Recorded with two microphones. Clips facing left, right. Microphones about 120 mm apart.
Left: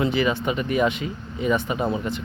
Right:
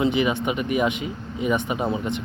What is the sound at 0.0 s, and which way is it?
Speech, 15° right (ahead or behind).